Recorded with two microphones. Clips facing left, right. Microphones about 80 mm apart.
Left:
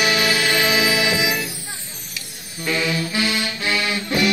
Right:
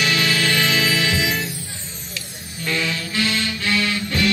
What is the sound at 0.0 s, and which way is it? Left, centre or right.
Music, centre.